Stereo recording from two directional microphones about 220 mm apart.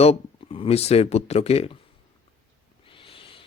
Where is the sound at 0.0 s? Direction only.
25° left (ahead or behind).